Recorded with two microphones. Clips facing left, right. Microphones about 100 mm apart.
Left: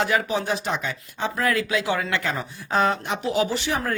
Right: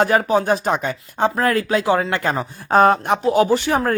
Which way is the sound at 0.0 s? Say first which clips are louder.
Right 7 dB; 45° right (ahead or behind).